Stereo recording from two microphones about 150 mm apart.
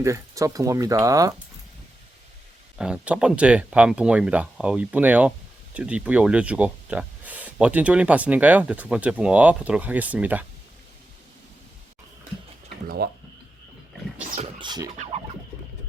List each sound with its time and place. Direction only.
0.0 s speech: 20° right (ahead or behind)
2.7 s speech: 5° right (ahead or behind)
13.0 s speech: 90° right
14.6 s scratching: 30° right (ahead or behind)